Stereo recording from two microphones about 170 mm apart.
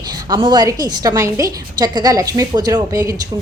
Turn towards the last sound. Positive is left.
turn(degrees=-20)  # may be behind; listen again after turning